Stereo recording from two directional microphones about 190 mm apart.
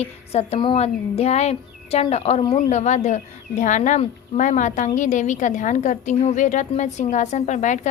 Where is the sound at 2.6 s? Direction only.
40° left (ahead or behind).